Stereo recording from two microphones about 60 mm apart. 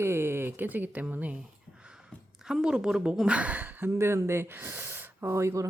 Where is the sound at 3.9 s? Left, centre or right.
Right.